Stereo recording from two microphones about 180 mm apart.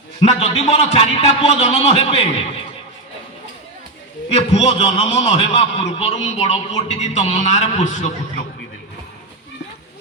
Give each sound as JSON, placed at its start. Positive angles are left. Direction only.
{"t": 0.3, "sound": "a man's voice", "side_deg": 35}
{"t": 4.3, "sound": "a man's voice", "side_deg": 35}